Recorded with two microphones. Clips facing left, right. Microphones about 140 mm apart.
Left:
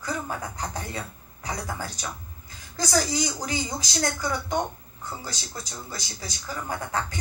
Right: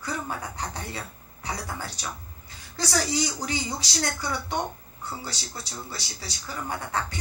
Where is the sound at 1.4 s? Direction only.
45° left (ahead or behind).